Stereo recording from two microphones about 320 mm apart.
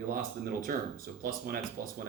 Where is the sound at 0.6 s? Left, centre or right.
Right.